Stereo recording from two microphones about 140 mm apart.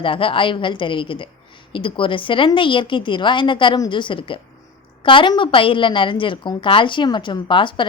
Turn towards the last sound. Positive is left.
turn(degrees=35)  # may be behind; listen again after turning